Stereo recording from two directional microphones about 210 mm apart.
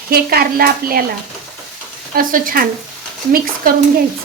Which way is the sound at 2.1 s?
40° right (ahead or behind).